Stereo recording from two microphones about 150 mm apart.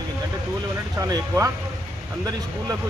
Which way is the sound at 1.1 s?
20° right (ahead or behind).